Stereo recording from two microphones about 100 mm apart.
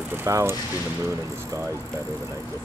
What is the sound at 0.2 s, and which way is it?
Speech, 30° right (ahead or behind).